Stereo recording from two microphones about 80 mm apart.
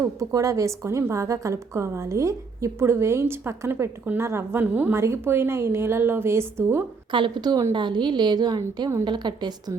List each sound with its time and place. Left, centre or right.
0.2 s a woman's voice: right
4.9 s a woman's voice: right
7.1 s a woman's voice: right
9.0 s a woman's voice: right